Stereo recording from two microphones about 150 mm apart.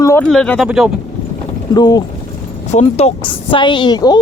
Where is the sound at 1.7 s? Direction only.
25° left (ahead or behind).